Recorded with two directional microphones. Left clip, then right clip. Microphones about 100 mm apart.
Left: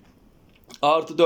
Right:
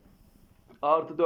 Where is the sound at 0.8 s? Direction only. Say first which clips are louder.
Left 5 dB; 35° left (ahead or behind).